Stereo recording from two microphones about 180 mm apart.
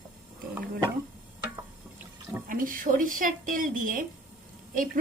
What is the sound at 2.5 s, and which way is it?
A woman's voice, 50° right (ahead or behind).